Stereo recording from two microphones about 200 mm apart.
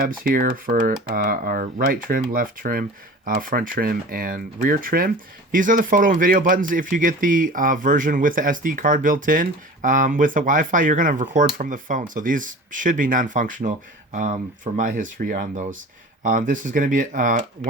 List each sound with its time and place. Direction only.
0.3 s speech: 45° right (ahead or behind)